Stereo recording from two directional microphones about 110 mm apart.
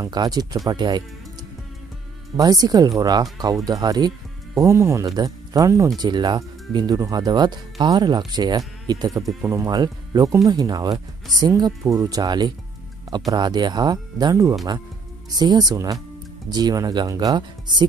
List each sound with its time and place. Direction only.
0.0 s speech: 35° right (ahead or behind)
2.3 s speech: 35° right (ahead or behind)
6.0 s speech: 40° right (ahead or behind)